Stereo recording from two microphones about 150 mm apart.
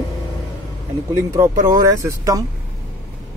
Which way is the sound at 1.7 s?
20° right (ahead or behind).